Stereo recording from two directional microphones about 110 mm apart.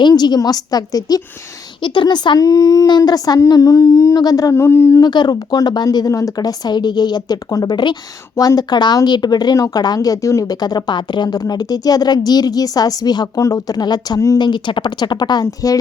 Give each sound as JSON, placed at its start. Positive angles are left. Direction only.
{"t": 0.0, "sound": "a woman's voice", "side_deg": 40}
{"t": 2.5, "sound": "speech", "side_deg": 30}
{"t": 5.0, "sound": "speech", "side_deg": 40}
{"t": 14.3, "sound": "speech", "side_deg": 45}